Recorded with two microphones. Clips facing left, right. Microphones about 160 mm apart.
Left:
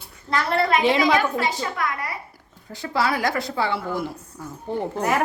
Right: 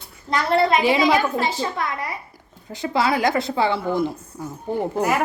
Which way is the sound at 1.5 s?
30° right (ahead or behind).